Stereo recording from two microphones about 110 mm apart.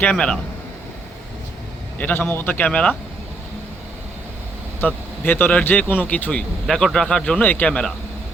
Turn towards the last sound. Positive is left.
turn(degrees=10)  # may be behind; listen again after turning